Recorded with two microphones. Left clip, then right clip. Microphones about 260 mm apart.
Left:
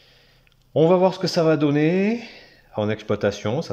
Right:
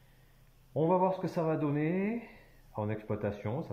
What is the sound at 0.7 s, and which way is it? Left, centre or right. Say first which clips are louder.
Speech: left 12 dB; left.